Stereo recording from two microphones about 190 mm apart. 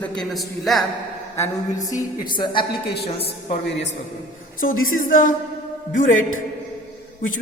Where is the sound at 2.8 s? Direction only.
60° left (ahead or behind).